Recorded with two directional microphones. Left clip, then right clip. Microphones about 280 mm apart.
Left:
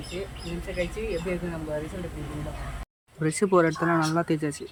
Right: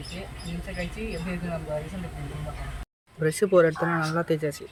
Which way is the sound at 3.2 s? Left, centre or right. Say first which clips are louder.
Right 2 dB; centre.